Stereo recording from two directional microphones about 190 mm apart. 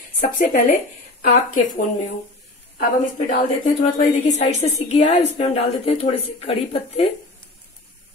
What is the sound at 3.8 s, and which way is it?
A woman's voice, 35° left (ahead or behind).